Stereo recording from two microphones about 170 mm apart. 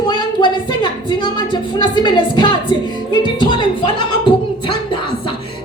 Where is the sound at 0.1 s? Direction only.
30° left (ahead or behind).